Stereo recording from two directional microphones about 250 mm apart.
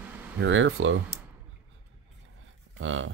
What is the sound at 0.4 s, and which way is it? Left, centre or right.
Speech, right.